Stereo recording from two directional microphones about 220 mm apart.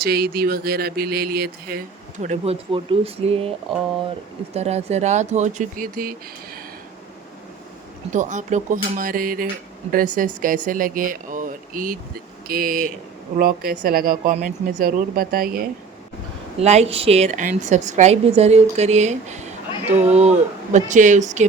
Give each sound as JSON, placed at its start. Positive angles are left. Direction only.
{"t": 0.0, "sound": "speech", "side_deg": -45}
{"t": 4.5, "sound": "a woman's voice", "side_deg": -30}
{"t": 8.1, "sound": "a woman's voice", "side_deg": -35}
{"t": 16.6, "sound": "a woman's voice", "side_deg": -30}